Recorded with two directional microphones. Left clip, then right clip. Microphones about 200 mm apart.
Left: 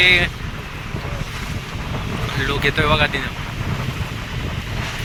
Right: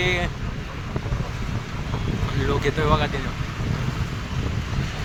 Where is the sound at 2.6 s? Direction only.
15° right (ahead or behind).